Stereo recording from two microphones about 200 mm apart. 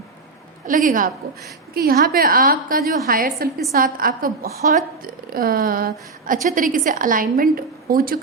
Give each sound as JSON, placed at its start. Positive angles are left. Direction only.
{"t": 0.7, "sound": "a woman's voice", "side_deg": -40}